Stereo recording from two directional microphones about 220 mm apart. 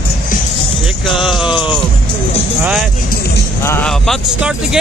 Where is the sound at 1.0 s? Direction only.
Centre (ahead or behind).